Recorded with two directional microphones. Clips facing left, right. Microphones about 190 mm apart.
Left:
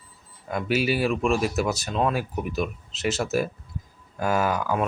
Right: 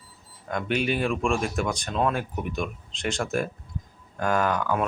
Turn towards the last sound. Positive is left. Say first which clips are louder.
# even
turn(degrees=10)  # may be behind; listen again after turning